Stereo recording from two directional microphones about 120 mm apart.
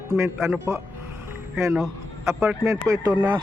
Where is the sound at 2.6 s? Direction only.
25° right (ahead or behind).